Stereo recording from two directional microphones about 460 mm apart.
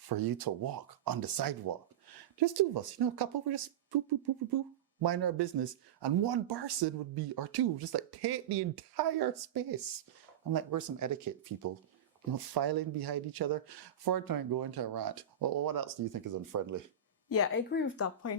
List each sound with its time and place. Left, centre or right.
0.1 s speech: right
17.2 s speech: left